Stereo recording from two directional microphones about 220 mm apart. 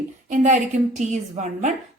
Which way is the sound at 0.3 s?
35° right (ahead or behind).